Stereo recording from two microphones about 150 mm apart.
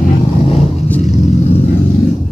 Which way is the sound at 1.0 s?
45° left (ahead or behind).